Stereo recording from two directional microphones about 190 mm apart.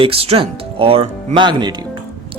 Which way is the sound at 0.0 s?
30° right (ahead or behind).